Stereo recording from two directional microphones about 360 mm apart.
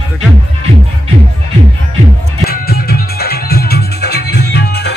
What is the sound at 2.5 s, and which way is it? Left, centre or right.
Music, left.